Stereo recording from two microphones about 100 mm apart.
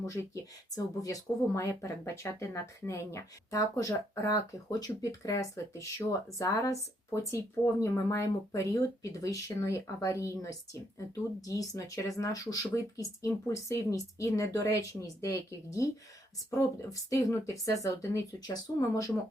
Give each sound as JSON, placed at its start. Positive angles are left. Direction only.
{"t": 0.0, "sound": "speech", "side_deg": 30}